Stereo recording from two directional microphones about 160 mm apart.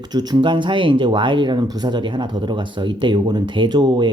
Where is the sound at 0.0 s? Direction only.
25° right (ahead or behind).